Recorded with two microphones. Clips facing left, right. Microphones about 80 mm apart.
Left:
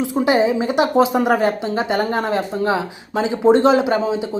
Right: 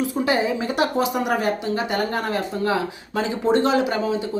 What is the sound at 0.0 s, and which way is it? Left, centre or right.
Speech, left.